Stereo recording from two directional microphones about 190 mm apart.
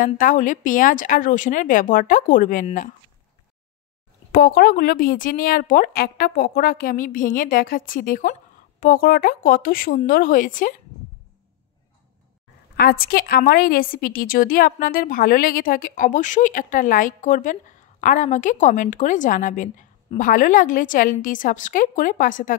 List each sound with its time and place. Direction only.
0.0 s a woman's voice: 45° left (ahead or behind)
4.3 s a woman's voice: 50° left (ahead or behind)
12.7 s a woman's voice: 50° left (ahead or behind)